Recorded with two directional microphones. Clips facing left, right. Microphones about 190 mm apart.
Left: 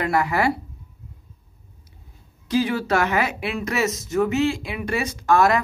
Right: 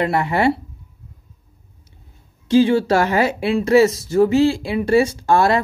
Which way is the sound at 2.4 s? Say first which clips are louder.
Right 8 dB; 30° right (ahead or behind).